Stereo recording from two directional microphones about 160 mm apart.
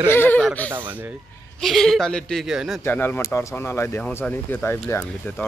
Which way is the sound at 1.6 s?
Centre (ahead or behind).